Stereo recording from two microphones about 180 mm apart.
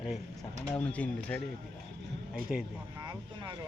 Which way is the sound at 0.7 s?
5° left (ahead or behind).